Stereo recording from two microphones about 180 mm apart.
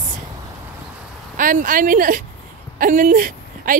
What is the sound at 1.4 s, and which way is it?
A woman's voice, 50° right (ahead or behind).